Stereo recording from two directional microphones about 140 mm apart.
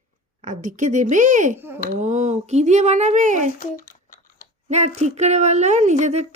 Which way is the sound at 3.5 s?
75° left (ahead or behind).